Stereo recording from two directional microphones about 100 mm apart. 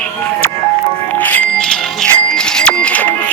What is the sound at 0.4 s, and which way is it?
Music, 25° left (ahead or behind).